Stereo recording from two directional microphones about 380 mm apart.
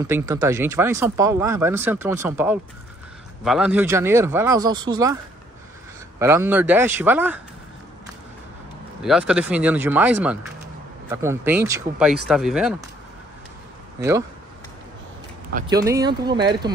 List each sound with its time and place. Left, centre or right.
0.0 s speech: centre
9.0 s speech: centre
15.5 s speech: centre